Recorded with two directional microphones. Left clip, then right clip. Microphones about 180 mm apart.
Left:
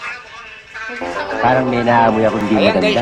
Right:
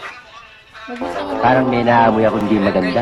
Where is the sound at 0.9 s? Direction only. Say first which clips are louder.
Even; centre (ahead or behind).